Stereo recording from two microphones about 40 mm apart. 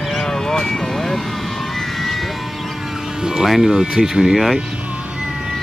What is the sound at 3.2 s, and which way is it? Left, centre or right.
Music, centre.